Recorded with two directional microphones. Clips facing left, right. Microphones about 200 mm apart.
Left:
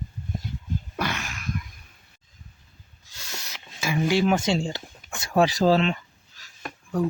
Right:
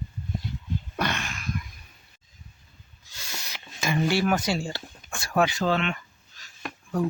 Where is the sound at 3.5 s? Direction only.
5° left (ahead or behind); by 6.0 s 35° left (ahead or behind).